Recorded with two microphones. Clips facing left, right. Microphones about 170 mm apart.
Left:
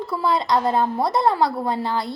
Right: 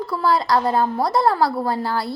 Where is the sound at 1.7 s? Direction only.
20° left (ahead or behind).